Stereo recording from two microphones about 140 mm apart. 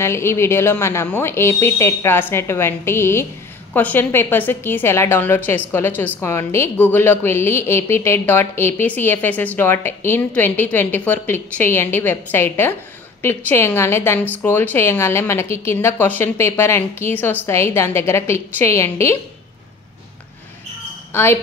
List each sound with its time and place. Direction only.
0.0 s a woman's voice: 20° left (ahead or behind)
21.1 s a woman's voice: 15° left (ahead or behind)